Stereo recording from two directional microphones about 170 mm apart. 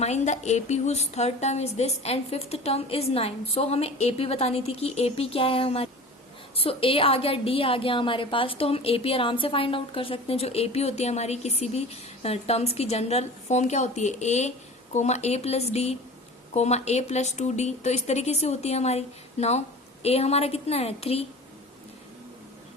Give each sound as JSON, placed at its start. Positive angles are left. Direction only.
{"t": 0.0, "sound": "a woman's voice", "side_deg": 40}